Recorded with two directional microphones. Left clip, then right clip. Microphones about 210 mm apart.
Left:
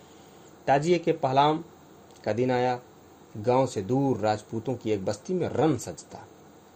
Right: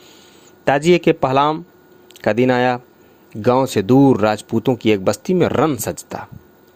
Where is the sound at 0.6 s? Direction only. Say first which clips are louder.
Right 9 dB; 35° right (ahead or behind).